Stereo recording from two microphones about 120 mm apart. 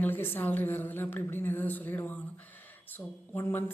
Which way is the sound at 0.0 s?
15° left (ahead or behind).